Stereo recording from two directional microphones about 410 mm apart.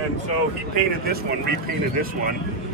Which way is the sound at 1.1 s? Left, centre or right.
Right.